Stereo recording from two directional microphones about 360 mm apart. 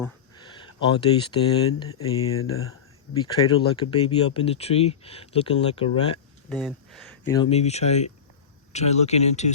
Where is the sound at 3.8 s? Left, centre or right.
Centre.